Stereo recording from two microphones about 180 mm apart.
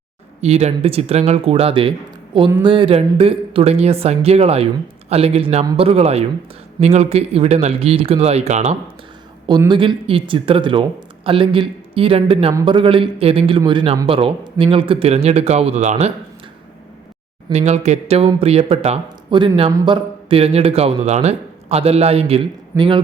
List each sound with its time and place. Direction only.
0.4 s speech: 35° right (ahead or behind)
9.5 s speech: 25° right (ahead or behind)
17.5 s speech: 35° right (ahead or behind)
22.7 s a man's voice: 15° right (ahead or behind)